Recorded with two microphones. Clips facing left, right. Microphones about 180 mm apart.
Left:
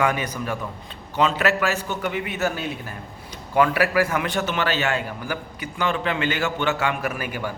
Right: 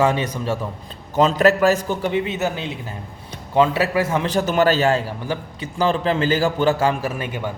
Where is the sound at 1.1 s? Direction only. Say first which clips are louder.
Right 5 dB; 40° right (ahead or behind); by 7.5 s 20° right (ahead or behind).